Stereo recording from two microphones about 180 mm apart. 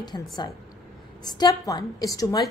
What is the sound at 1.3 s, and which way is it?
A woman's voice, 20° left (ahead or behind).